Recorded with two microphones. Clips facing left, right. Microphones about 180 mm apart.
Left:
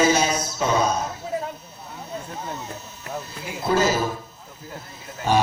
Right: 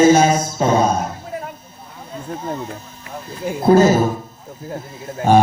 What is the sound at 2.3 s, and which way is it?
A man's voice, 50° right (ahead or behind).